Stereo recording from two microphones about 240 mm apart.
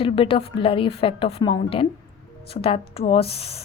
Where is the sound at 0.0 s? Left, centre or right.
Left.